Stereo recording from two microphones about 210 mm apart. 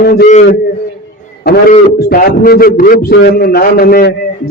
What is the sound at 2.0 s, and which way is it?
A man's voice, 45° left (ahead or behind).